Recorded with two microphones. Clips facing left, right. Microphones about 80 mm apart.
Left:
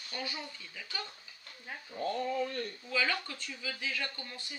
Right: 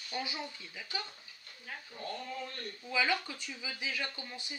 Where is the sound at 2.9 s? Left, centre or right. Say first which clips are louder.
Right 2 dB; centre.